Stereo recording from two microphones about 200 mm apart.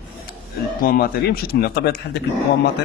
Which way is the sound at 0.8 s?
50° left (ahead or behind).